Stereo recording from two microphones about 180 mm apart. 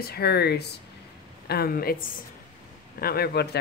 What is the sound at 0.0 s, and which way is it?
A woman's voice, 60° left (ahead or behind).